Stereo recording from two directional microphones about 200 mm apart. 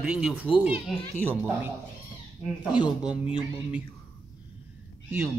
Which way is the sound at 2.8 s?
20° left (ahead or behind).